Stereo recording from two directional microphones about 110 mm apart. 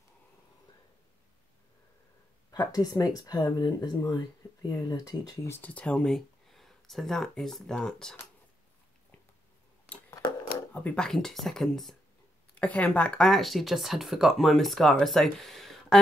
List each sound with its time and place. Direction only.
2.5 s speech: 35° left (ahead or behind)
5.6 s speech: 10° left (ahead or behind)
9.9 s a sound: 15° left (ahead or behind)
10.7 s speech: 15° left (ahead or behind)